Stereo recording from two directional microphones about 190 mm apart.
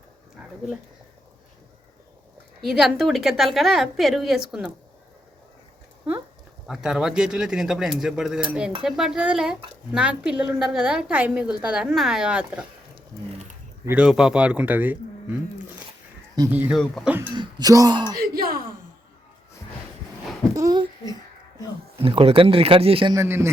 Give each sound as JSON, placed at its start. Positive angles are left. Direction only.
{"t": 2.6, "sound": "a woman's voice", "side_deg": 0}
{"t": 6.7, "sound": "a woman's voice", "side_deg": -5}
{"t": 13.8, "sound": "a man's voice", "side_deg": -5}
{"t": 16.5, "sound": "a man's voice", "side_deg": -10}
{"t": 16.8, "sound": "a woman's voice", "side_deg": 5}
{"t": 17.1, "sound": "a man's voice", "side_deg": -10}
{"t": 17.3, "sound": "speech", "side_deg": -20}
{"t": 18.3, "sound": "a sound", "side_deg": -50}
{"t": 20.6, "sound": "speech", "side_deg": -20}
{"t": 21.9, "sound": "speech", "side_deg": -30}
{"t": 23.1, "sound": "a man's voice", "side_deg": -15}